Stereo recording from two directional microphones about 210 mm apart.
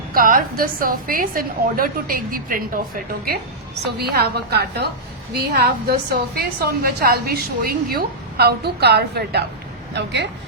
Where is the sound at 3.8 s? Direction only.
50° right (ahead or behind).